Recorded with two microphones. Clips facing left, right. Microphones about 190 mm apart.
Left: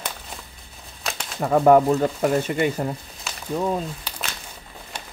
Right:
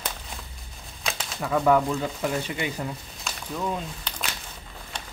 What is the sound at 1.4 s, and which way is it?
Speech, 45° left (ahead or behind).